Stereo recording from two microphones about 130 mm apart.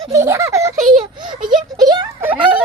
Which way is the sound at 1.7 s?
30° right (ahead or behind).